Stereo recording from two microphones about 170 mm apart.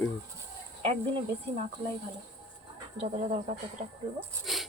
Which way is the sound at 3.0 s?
40° right (ahead or behind).